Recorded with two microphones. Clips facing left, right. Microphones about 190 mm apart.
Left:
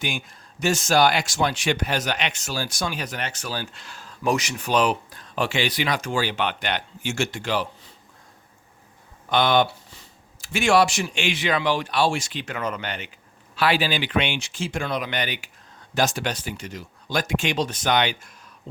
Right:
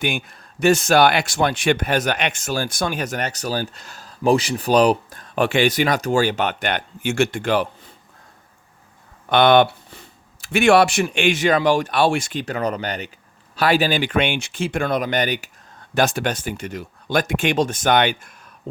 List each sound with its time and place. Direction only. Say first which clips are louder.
0.0 s speech: right 6 dB; 60° right (ahead or behind); by 5.2 s 40° right (ahead or behind)
5.2 s speech: right 7 dB; 55° right (ahead or behind)
9.3 s speech: right 6 dB; 60° right (ahead or behind); by 15.4 s 45° right (ahead or behind)
16.0 s speech: right 4 dB; 60° right (ahead or behind)